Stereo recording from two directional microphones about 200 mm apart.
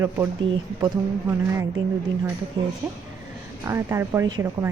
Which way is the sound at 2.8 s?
10° right (ahead or behind).